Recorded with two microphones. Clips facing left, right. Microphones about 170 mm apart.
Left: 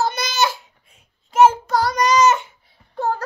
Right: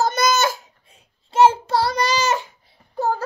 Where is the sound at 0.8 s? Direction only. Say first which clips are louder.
Right 3 dB; 30° right (ahead or behind).